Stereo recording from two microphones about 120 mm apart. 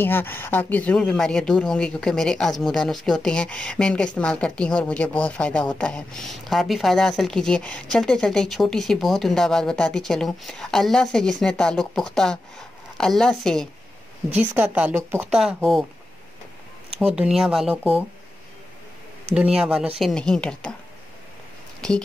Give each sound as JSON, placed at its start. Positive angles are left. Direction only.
{"t": 0.0, "sound": "speech", "side_deg": 15}
{"t": 14.3, "sound": "a woman's voice", "side_deg": -15}
{"t": 15.3, "sound": "speech", "side_deg": 0}
{"t": 17.0, "sound": "speech", "side_deg": -10}
{"t": 19.3, "sound": "a woman's voice", "side_deg": -5}
{"t": 20.0, "sound": "speech", "side_deg": 5}